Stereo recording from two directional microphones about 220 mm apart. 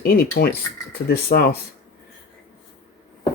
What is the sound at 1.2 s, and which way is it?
Speech, 45° left (ahead or behind).